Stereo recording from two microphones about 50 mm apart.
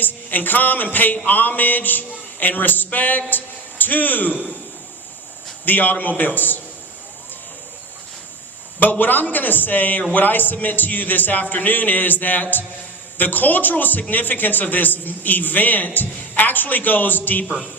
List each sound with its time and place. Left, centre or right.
0.0 s a man's voice: left
5.6 s a man's voice: left
8.8 s a man's voice: left